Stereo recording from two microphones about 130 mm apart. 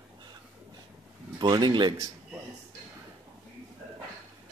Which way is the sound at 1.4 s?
35° right (ahead or behind).